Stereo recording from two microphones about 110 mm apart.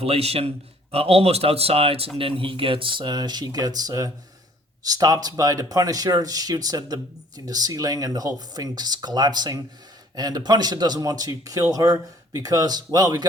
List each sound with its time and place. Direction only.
0.0 s a man's voice: 65° right (ahead or behind); by 13.2 s 35° right (ahead or behind)